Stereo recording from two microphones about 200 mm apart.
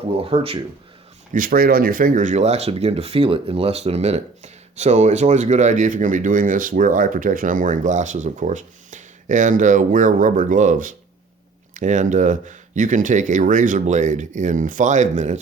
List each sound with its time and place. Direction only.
0.1 s speech: 30° right (ahead or behind)
1.3 s speech: 45° right (ahead or behind)